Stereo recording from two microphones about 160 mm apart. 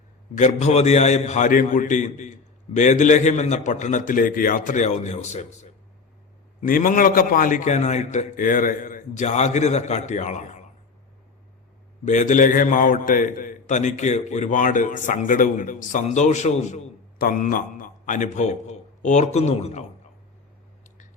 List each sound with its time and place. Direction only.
0.3 s a man's voice: 45° left (ahead or behind)
6.6 s a man's voice: 60° left (ahead or behind)
12.0 s a man's voice: 50° left (ahead or behind)
17.2 s a man's voice: 60° left (ahead or behind)